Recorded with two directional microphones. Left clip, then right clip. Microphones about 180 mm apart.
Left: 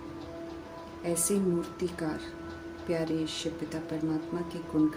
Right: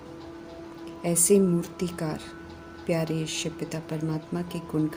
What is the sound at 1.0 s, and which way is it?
Speech, 50° right (ahead or behind).